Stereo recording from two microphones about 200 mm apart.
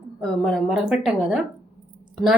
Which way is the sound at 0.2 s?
Centre (ahead or behind).